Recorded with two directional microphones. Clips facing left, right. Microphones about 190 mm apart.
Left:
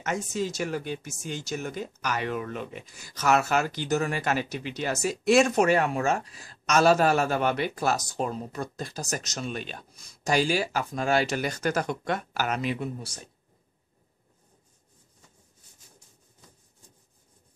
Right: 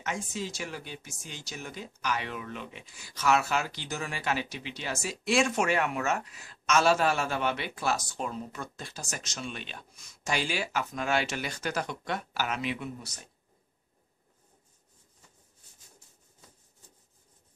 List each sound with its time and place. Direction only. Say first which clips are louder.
0.0 s speech: left 6 dB; 45° left (ahead or behind)